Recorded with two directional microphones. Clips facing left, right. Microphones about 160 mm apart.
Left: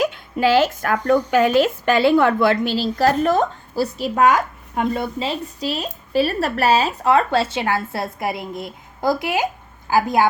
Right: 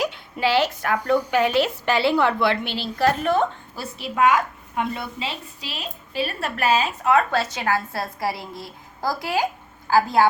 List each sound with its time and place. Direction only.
0.0 s a woman's voice: 45° left (ahead or behind); by 10.2 s 15° left (ahead or behind)